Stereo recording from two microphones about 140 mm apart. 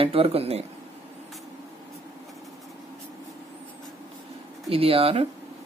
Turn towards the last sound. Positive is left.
turn(degrees=-45)  # may be behind; listen again after turning